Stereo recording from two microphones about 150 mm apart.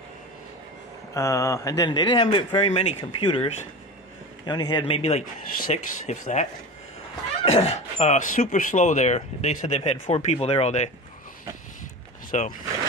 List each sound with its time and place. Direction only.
1.1 s speech: 20° left (ahead or behind); by 6.4 s 50° left (ahead or behind)
7.4 s speech: 45° left (ahead or behind)
12.3 s speech: 65° left (ahead or behind)